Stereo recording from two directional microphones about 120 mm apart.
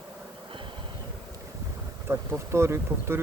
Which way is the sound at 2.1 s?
20° right (ahead or behind).